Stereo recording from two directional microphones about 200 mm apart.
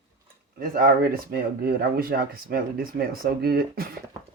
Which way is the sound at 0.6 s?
45° right (ahead or behind).